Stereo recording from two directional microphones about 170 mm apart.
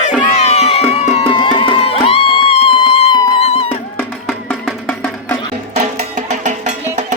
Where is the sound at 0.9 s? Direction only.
40° left (ahead or behind).